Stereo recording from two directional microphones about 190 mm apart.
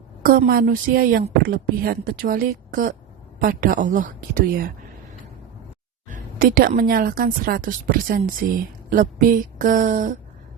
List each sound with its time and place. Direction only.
0.2 s a woman's voice: 50° right (ahead or behind)
6.1 s a woman's voice: 50° right (ahead or behind)